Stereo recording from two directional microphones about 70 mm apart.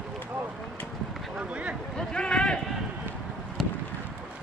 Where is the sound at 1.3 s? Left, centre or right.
Centre.